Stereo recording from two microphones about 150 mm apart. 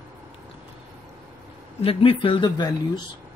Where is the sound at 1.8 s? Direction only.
40° left (ahead or behind).